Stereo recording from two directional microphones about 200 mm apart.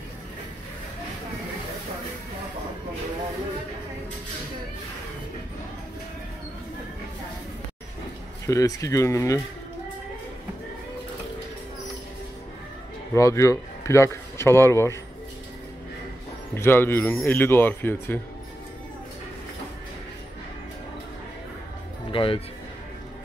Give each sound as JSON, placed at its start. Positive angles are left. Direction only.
{"t": 8.5, "sound": "speech", "side_deg": 15}
{"t": 13.1, "sound": "speech", "side_deg": 15}
{"t": 16.5, "sound": "speech", "side_deg": 10}
{"t": 22.1, "sound": "speech", "side_deg": 25}